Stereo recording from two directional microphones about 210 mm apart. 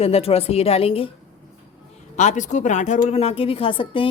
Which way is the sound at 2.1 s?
35° left (ahead or behind).